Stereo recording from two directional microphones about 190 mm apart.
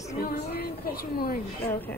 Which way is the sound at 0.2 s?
50° left (ahead or behind).